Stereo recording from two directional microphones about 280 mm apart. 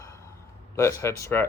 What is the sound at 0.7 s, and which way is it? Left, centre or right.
Speech, centre.